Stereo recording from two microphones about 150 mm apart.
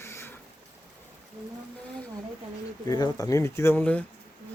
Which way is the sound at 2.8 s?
25° left (ahead or behind).